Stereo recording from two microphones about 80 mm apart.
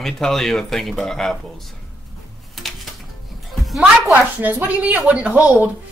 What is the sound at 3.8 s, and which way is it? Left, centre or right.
A woman's voice, right.